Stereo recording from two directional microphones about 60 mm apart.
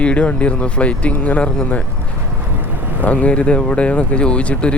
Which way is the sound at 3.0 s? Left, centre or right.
Left.